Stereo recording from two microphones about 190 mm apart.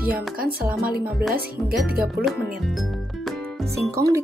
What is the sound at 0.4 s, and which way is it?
Speech, 50° right (ahead or behind).